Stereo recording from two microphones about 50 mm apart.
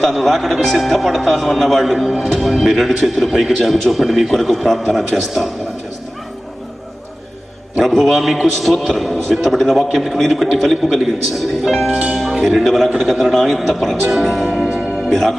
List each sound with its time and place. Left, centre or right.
0.1 s speech: centre
7.9 s speech: centre
11.9 s speech: right
12.1 s speech: centre
14.0 s music: centre
15.1 s speech: centre